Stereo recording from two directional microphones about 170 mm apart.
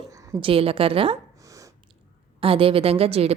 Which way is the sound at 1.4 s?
20° right (ahead or behind).